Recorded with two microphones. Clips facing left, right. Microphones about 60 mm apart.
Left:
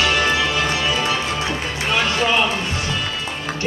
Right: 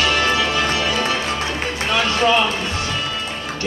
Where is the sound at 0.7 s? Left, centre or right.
Left.